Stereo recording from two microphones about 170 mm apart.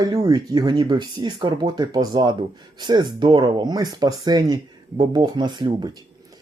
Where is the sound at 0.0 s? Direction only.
20° right (ahead or behind).